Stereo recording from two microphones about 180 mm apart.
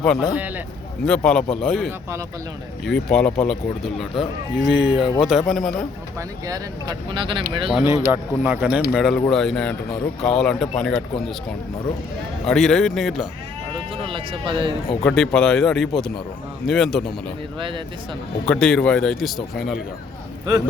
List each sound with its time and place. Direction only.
0.0 s a man's voice: 5° left (ahead or behind)
0.3 s speech: 10° right (ahead or behind)
1.0 s a man's voice: 5° left (ahead or behind)
6.1 s speech: 20° right (ahead or behind)
7.9 s a man's voice: 15° right (ahead or behind); by 11.0 s 5° left (ahead or behind)
12.5 s a man's voice: centre (ahead or behind)
13.7 s speech: 30° right (ahead or behind)
15.0 s a man's voice: 5° left (ahead or behind)
18.4 s a man's voice: 5° left (ahead or behind)